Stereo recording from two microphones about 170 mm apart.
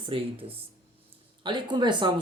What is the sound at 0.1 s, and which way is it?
Speech, 35° right (ahead or behind).